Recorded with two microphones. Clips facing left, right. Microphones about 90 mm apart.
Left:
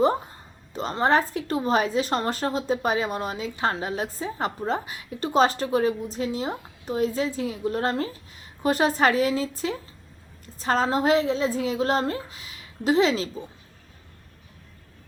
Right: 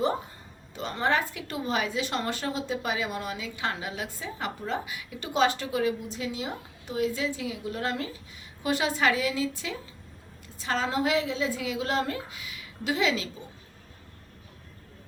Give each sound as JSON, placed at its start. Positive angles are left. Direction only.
{"t": 0.7, "sound": "a woman's voice", "side_deg": 35}